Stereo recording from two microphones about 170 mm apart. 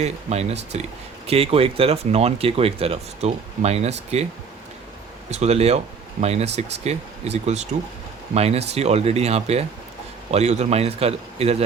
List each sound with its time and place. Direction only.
0.0 s speech: 40° right (ahead or behind)
5.3 s speech: 40° right (ahead or behind)